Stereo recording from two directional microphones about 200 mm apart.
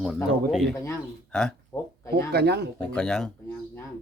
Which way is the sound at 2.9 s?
5° left (ahead or behind).